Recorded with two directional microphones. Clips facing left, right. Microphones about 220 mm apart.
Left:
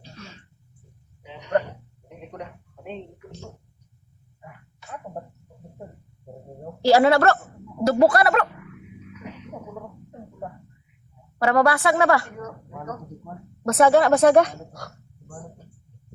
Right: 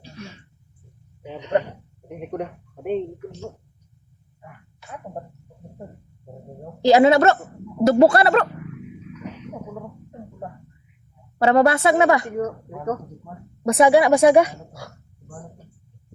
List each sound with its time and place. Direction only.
1.4 s a woman's voice: 20° right (ahead or behind)
2.0 s speech: 55° right (ahead or behind)
6.8 s a woman's voice: 20° right (ahead or behind)
11.3 s a woman's voice: 25° right (ahead or behind)
12.4 s speech: 50° right (ahead or behind)
13.6 s speech: 15° right (ahead or behind)